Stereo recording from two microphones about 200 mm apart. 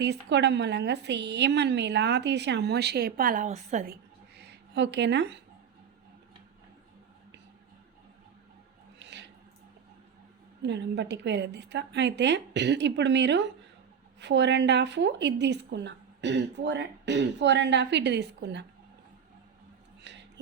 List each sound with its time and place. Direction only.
0.0 s a woman's voice: 60° right (ahead or behind); by 3.9 s 35° right (ahead or behind)
4.7 s a woman's voice: 60° right (ahead or behind)
9.0 s squish: 60° right (ahead or behind)
10.6 s a woman's voice: 60° right (ahead or behind)
20.1 s a sound: 60° right (ahead or behind)